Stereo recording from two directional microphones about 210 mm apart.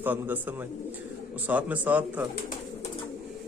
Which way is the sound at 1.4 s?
5° right (ahead or behind).